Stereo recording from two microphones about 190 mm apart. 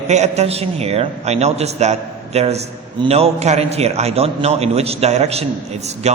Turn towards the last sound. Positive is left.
turn(degrees=-35)  # may be behind; listen again after turning